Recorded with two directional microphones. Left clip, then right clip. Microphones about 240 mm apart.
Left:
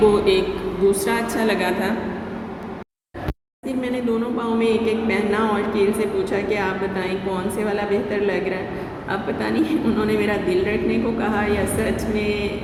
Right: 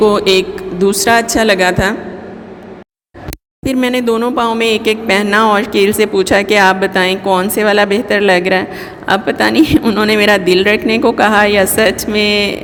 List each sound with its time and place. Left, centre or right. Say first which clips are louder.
0.1 s a woman's voice: right 6 dB; right
3.6 s speech: right 11 dB; right